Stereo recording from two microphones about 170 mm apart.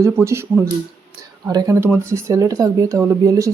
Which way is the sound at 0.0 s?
15° right (ahead or behind).